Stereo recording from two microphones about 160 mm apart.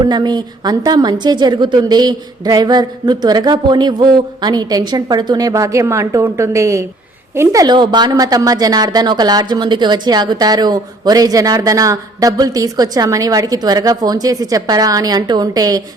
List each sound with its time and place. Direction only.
0.0 s a woman's voice: 25° right (ahead or behind)